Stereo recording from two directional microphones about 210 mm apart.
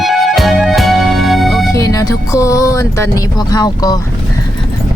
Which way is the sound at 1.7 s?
15° left (ahead or behind).